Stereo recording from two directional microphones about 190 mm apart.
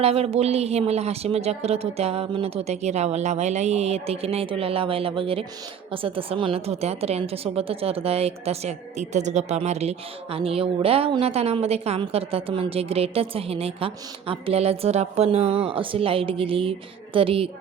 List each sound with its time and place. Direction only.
0.0 s a woman's voice: 30° right (ahead or behind)